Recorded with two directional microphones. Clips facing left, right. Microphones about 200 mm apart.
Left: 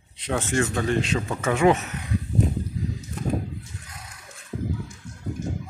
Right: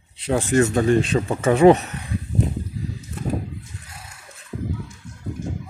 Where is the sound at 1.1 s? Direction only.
35° right (ahead or behind).